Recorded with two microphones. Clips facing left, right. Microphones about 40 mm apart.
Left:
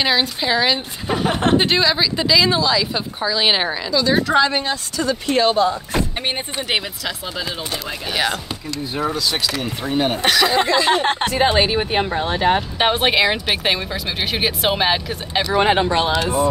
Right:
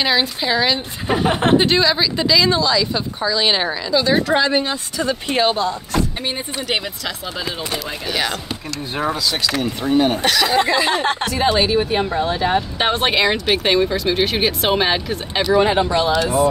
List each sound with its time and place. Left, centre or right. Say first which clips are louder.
0.0 s speech: even; centre
1.0 s speech: right 3 dB; centre
1.3 s speech: right 1 dB; right
1.6 s speech: right 1 dB; centre
3.9 s speech: right 2 dB; centre
4.3 s speech: even; centre
4.9 s speech: left 1 dB; right
5.6 s speech: left 2 dB; centre
8.1 s speech: left 1 dB; centre
9.6 s speech: right 4 dB; centre
11.1 s speech: left 1 dB; left
12.7 s speech: left 1 dB; centre
15.4 s speech: right 2 dB; left
15.7 s speech: even; left